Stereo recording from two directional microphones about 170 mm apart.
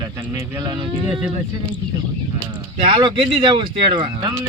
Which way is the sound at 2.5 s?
25° right (ahead or behind).